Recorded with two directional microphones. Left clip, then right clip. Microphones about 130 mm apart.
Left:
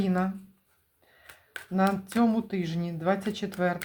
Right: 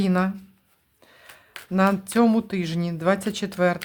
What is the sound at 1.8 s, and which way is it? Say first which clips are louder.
Speech: right 6 dB; 40° right (ahead or behind).